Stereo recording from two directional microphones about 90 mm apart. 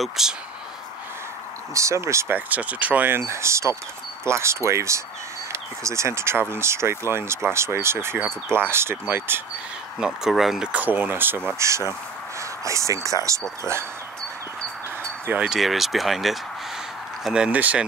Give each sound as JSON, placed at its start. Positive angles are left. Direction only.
{"t": 0.0, "sound": "speech", "side_deg": -5}
{"t": 1.7, "sound": "speech", "side_deg": -35}
{"t": 2.3, "sound": "speech", "side_deg": -15}
{"t": 9.9, "sound": "speech", "side_deg": -5}
{"t": 10.7, "sound": "speech", "side_deg": -15}
{"t": 15.2, "sound": "speech", "side_deg": -10}